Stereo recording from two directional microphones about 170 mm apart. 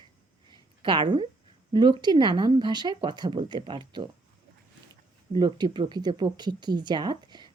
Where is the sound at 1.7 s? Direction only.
25° right (ahead or behind).